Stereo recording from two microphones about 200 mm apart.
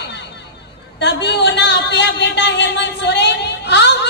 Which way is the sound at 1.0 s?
60° left (ahead or behind).